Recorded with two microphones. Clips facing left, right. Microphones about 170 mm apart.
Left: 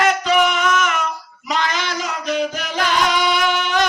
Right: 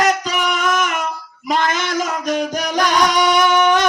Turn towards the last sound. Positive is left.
turn(degrees=-50)  # may be behind; listen again after turning